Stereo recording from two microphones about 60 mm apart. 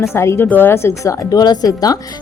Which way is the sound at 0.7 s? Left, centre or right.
Left.